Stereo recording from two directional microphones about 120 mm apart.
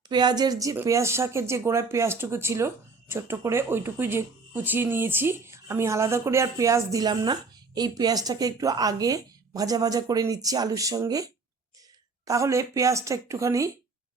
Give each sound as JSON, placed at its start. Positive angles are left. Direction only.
{"t": 0.1, "sound": "a woman's voice", "side_deg": -35}